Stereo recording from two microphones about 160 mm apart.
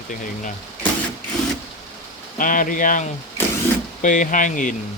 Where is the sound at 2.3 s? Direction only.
55° left (ahead or behind).